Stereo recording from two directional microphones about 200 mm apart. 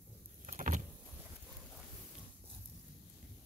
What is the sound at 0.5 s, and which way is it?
Vehicle, 40° right (ahead or behind).